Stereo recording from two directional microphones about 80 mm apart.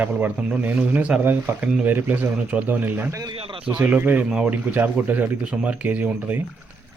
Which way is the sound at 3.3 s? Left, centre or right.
Right.